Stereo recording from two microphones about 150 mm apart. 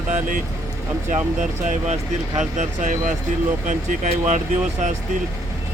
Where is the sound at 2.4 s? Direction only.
55° right (ahead or behind).